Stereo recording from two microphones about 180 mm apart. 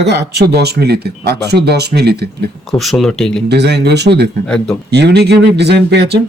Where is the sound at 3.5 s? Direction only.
65° right (ahead or behind).